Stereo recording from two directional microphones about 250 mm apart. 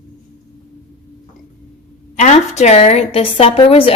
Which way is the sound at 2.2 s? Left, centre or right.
Left.